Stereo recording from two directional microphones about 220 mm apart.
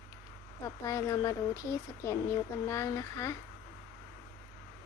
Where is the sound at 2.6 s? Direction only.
15° left (ahead or behind).